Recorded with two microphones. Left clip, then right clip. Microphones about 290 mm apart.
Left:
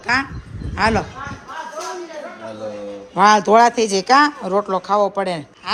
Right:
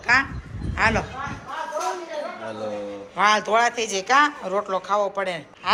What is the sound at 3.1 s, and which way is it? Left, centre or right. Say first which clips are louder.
A man's voice: left 7 dB; centre.